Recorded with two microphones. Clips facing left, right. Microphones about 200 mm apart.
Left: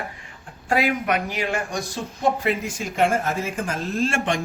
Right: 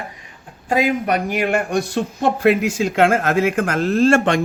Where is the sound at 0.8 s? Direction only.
40° right (ahead or behind).